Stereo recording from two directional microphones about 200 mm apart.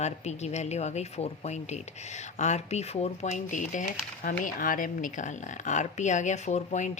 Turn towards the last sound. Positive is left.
turn(degrees=35)  # may be behind; listen again after turning